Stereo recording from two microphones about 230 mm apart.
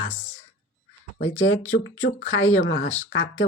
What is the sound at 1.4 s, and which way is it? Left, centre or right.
Speech, left.